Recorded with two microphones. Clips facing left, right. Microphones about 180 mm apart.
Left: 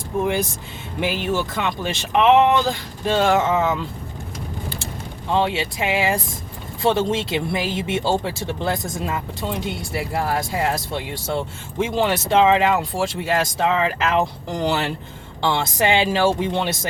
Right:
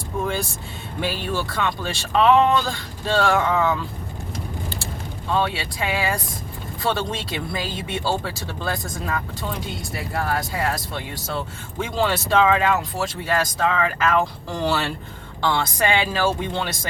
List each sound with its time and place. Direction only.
0.2 s speech: 20° left (ahead or behind)
5.3 s speech: 25° left (ahead or behind)